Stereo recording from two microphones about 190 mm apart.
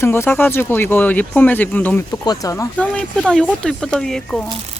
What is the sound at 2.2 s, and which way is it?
Speech, 20° left (ahead or behind).